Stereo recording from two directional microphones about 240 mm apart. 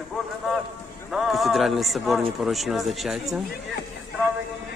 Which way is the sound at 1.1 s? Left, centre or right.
Centre.